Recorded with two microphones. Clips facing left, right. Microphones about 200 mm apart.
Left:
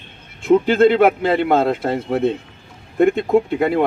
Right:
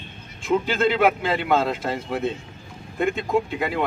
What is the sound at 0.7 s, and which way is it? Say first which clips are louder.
A man's voice: left 6 dB; 55° left (ahead or behind).